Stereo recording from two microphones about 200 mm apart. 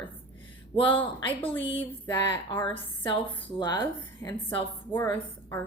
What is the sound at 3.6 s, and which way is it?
A woman's voice, 20° left (ahead or behind).